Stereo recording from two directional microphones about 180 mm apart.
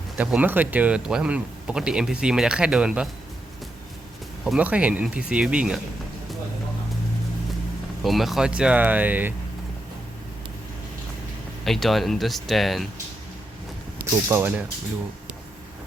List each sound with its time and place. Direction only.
0.2 s speech: 10° right (ahead or behind)
4.4 s speech: 5° right (ahead or behind)
8.0 s speech: centre (ahead or behind)
11.6 s speech: centre (ahead or behind)
14.3 s speech: 10° right (ahead or behind)